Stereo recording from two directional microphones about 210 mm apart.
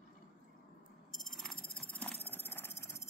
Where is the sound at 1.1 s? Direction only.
Centre (ahead or behind).